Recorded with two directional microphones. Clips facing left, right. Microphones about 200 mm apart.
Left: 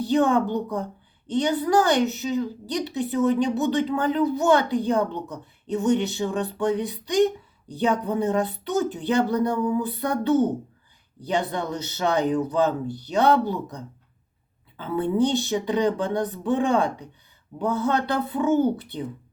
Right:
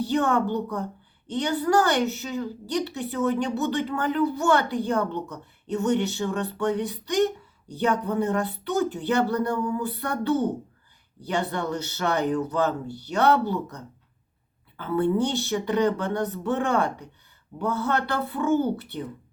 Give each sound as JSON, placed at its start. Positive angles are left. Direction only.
{"t": 0.0, "sound": "speech", "side_deg": 15}